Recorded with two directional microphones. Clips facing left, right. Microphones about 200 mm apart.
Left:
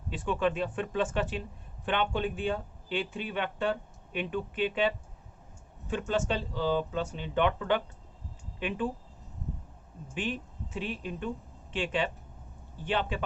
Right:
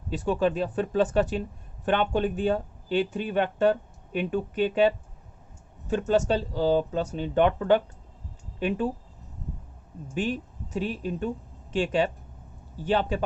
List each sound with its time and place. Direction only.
0.1 s speech: 40° right (ahead or behind)
10.2 s speech: 40° right (ahead or behind)